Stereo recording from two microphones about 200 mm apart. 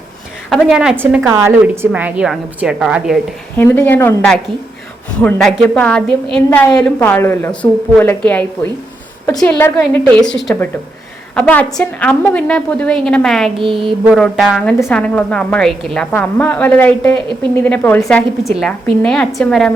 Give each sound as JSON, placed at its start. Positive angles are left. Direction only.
{"t": 0.5, "sound": "a woman's voice", "side_deg": -5}
{"t": 3.6, "sound": "a woman's voice", "side_deg": 10}
{"t": 5.2, "sound": "a woman's voice", "side_deg": 5}
{"t": 18.5, "sound": "a woman's voice", "side_deg": 0}